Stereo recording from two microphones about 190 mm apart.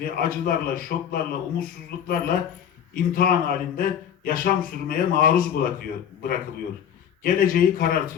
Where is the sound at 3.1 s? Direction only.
50° left (ahead or behind).